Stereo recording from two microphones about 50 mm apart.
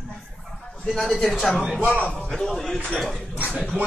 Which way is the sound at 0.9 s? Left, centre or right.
Centre.